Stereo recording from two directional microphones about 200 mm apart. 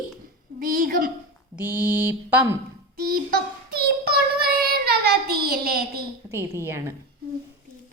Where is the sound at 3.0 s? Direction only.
50° right (ahead or behind).